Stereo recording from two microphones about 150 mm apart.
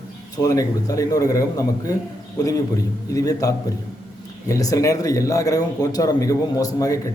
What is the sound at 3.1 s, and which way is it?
Speech, 25° left (ahead or behind).